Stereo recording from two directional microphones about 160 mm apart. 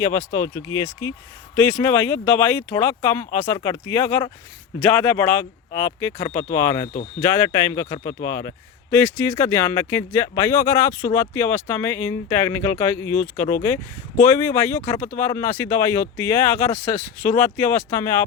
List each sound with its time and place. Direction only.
0.2 s speech: 15° left (ahead or behind)